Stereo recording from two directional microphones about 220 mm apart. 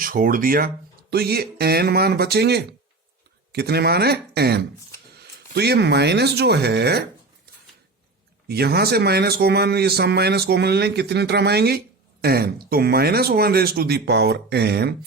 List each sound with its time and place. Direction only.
0.0 s a man's voice: 40° right (ahead or behind)
8.4 s a man's voice: 45° right (ahead or behind)